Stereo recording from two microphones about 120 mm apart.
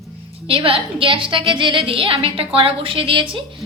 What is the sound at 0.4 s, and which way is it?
A woman's voice, 50° right (ahead or behind).